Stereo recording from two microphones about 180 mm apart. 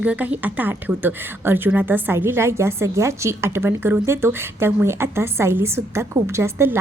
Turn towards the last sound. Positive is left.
turn(degrees=-15)  # may be behind; listen again after turning